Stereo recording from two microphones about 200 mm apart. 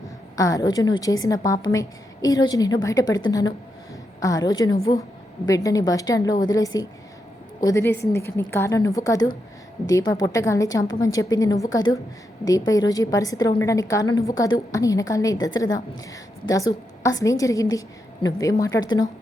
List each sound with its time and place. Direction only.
0.3 s a woman's voice: 15° left (ahead or behind)